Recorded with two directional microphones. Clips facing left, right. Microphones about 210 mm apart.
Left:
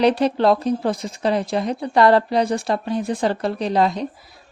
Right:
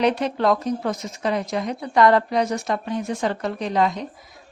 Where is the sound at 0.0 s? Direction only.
35° left (ahead or behind).